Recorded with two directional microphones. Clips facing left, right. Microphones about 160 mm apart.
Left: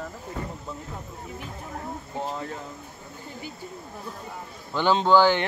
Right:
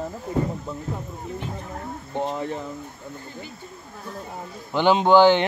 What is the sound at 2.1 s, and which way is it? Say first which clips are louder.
Speech: right 6 dB; 30° right (ahead or behind).